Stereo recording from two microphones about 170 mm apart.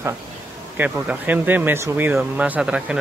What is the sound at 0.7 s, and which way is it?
Speech, 10° right (ahead or behind).